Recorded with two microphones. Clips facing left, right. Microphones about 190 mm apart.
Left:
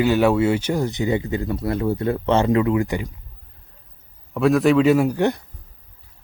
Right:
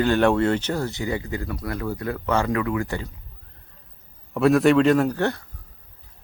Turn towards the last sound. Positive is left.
turn(degrees=15)  # may be behind; listen again after turning